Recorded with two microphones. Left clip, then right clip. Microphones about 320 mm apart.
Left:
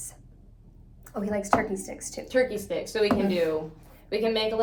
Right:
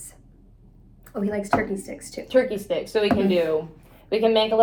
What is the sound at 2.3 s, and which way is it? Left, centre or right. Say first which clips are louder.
Speech: right 4 dB; centre.